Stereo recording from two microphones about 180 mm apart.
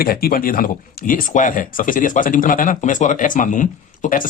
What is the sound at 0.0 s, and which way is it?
Speech, 55° left (ahead or behind).